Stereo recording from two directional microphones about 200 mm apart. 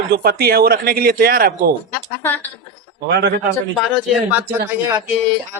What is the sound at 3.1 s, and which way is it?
Speech, 60° right (ahead or behind).